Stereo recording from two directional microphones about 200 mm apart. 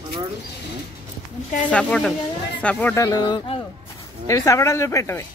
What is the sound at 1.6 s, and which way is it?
Speech, 5° left (ahead or behind).